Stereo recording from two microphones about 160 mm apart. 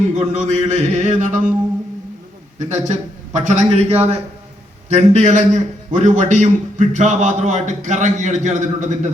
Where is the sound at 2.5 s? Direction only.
50° right (ahead or behind).